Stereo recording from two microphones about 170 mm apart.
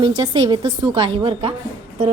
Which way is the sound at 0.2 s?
25° right (ahead or behind).